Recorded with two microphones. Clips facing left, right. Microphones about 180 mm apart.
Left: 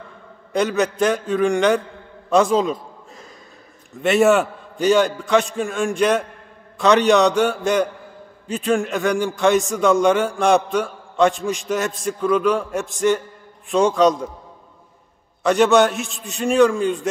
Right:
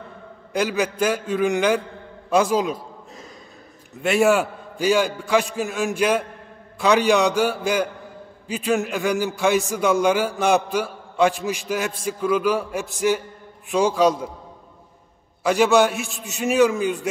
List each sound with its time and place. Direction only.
0.5 s a man's voice: 5° right (ahead or behind)
4.0 s a man's voice: centre (ahead or behind)
15.4 s a man's voice: 5° right (ahead or behind)
16.1 s a man's voice: 65° right (ahead or behind)
16.3 s a man's voice: 5° right (ahead or behind)